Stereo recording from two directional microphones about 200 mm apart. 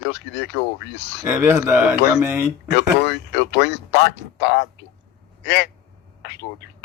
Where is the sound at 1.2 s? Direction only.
10° right (ahead or behind).